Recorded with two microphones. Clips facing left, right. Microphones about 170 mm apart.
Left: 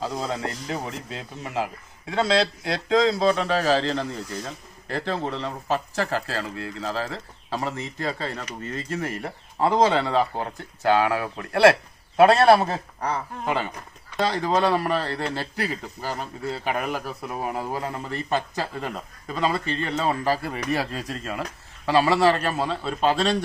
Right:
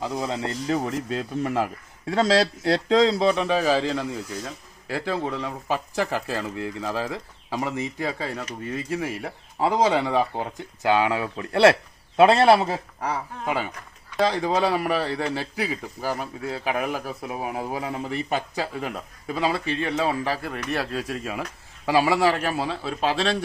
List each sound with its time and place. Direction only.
0.0 s speech: 20° right (ahead or behind)
0.7 s speech: 40° right (ahead or behind)
2.0 s speech: 35° right (ahead or behind)
3.2 s a man's voice: 15° right (ahead or behind)
20.2 s a man's voice: centre (ahead or behind)